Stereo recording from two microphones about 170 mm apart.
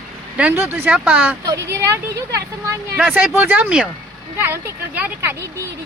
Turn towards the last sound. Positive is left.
turn(degrees=-15)  # may be behind; listen again after turning